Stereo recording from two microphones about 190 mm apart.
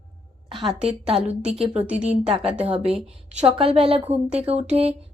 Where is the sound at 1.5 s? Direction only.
35° right (ahead or behind).